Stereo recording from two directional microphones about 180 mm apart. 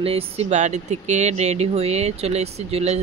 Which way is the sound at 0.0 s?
35° right (ahead or behind).